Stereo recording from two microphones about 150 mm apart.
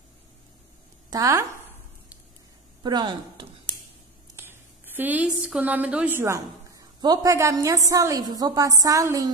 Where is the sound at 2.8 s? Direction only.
30° right (ahead or behind).